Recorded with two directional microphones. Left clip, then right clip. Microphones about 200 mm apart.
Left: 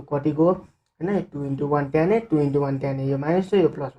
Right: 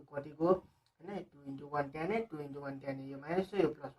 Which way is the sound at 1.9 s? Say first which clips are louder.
Left 17 dB; 30° left (ahead or behind).